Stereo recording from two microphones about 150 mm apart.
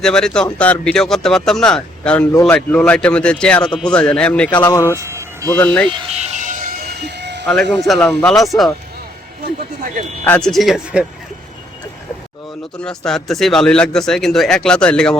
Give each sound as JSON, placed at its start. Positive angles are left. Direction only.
{"t": 0.0, "sound": "a man's voice", "side_deg": 5}
{"t": 4.6, "sound": "speech", "side_deg": 20}
{"t": 4.9, "sound": "music", "side_deg": -20}
{"t": 5.5, "sound": "a man's voice", "side_deg": 10}
{"t": 5.9, "sound": "music", "side_deg": -35}
{"t": 7.4, "sound": "speech", "side_deg": 5}
{"t": 10.2, "sound": "speech", "side_deg": 5}
{"t": 12.7, "sound": "speech", "side_deg": 5}